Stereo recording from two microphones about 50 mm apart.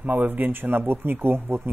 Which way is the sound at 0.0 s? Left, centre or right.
Right.